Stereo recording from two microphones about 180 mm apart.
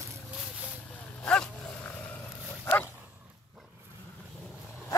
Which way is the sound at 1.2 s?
5° left (ahead or behind).